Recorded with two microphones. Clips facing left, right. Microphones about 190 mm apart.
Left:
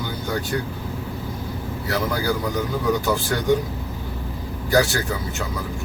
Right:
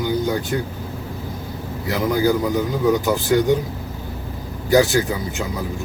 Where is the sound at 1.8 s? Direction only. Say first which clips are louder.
Right 5 dB; 15° right (ahead or behind).